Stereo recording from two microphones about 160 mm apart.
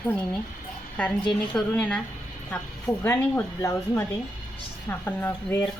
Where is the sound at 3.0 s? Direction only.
15° left (ahead or behind).